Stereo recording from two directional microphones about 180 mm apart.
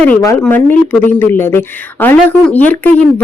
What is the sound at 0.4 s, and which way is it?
Speech, 10° left (ahead or behind).